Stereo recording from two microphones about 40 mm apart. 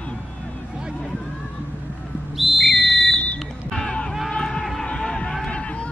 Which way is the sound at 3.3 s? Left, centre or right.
Centre.